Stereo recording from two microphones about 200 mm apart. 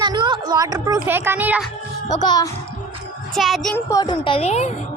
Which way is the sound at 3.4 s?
Centre (ahead or behind).